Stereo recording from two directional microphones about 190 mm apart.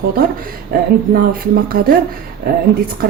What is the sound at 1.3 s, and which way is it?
Speech, 50° right (ahead or behind).